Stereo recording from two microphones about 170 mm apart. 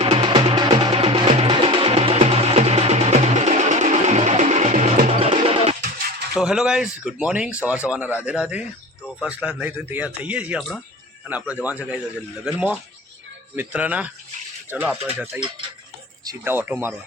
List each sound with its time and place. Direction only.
0.0 s music: 30° right (ahead or behind)
6.3 s speech: 5° right (ahead or behind)
16.2 s speech: 15° right (ahead or behind)